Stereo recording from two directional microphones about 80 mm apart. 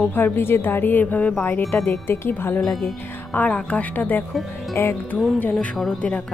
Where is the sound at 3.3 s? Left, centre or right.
Centre.